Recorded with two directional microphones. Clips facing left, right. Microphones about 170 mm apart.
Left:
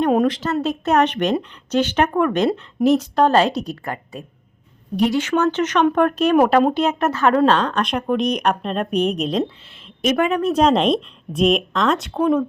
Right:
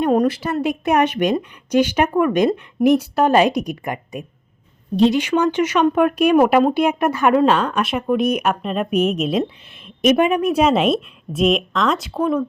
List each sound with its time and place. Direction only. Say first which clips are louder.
0.3 s speech: even; 10° right (ahead or behind)
5.2 s speech: right 1 dB; 15° right (ahead or behind)
9.6 s a woman's voice: right 5 dB; 15° right (ahead or behind); by 12.5 s centre (ahead or behind)